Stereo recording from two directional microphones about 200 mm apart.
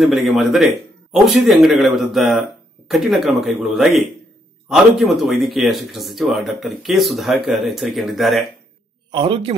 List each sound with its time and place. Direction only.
0.0 s speech: centre (ahead or behind)
9.1 s a man's voice: 25° right (ahead or behind)